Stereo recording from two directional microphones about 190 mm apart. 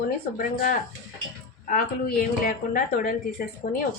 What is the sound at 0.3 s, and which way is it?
A woman's voice, 45° left (ahead or behind).